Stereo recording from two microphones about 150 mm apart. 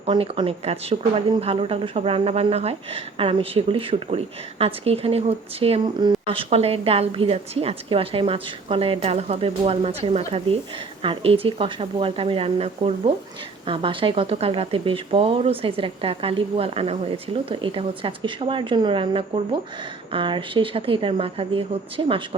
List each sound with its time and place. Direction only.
0.0 s speech: 35° right (ahead or behind)